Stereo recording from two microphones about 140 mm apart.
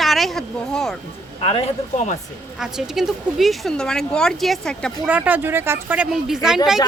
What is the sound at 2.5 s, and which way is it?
Speech, 5° right (ahead or behind).